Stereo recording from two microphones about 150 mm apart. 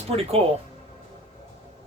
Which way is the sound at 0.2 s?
40° right (ahead or behind).